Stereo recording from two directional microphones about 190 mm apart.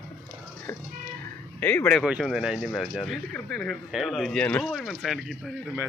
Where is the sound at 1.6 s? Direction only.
10° left (ahead or behind).